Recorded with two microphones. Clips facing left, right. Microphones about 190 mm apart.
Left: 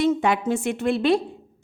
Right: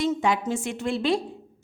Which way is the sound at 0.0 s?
60° left (ahead or behind).